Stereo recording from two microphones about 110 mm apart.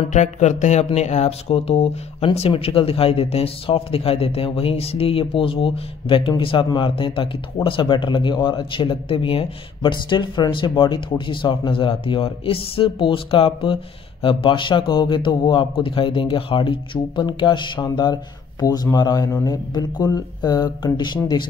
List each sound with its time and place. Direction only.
0.1 s speech: 90° left; by 2.2 s 70° left (ahead or behind)
2.2 s speech: 60° left (ahead or behind)